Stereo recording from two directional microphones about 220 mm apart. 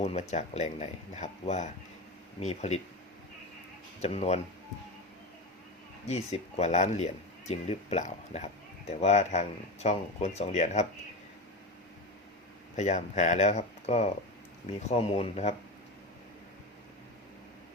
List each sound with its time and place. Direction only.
0.0 s speech: 30° left (ahead or behind)
4.0 s speech: 30° left (ahead or behind)
6.1 s speech: 30° left (ahead or behind)
12.7 s speech: 30° left (ahead or behind)